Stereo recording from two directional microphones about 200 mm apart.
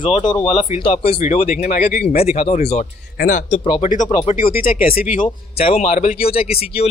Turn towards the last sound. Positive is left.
turn(degrees=30)  # may be behind; listen again after turning